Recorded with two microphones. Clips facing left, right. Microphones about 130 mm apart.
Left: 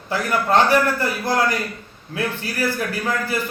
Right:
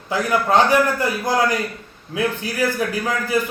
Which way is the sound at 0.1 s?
15° right (ahead or behind).